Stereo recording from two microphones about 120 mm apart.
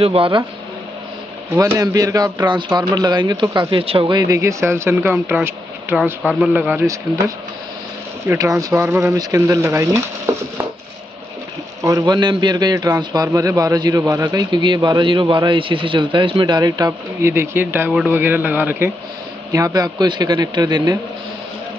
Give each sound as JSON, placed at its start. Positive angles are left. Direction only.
{"t": 0.0, "sound": "speech", "side_deg": -50}
{"t": 1.6, "sound": "a man's voice", "side_deg": -30}
{"t": 8.3, "sound": "speech", "side_deg": -30}
{"t": 11.8, "sound": "a man's voice", "side_deg": -30}
{"t": 17.3, "sound": "speech", "side_deg": -20}
{"t": 19.5, "sound": "a man's voice", "side_deg": -30}